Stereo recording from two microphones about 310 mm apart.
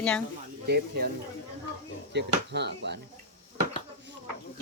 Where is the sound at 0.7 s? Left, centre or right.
Right.